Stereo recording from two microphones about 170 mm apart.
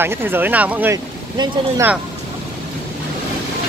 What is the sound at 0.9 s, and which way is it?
Boat, 25° right (ahead or behind).